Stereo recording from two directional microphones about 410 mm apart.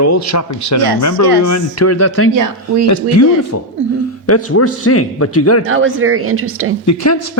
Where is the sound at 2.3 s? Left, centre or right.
Right.